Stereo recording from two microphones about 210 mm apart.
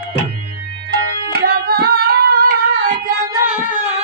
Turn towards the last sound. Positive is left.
turn(degrees=-5)  # may be behind; listen again after turning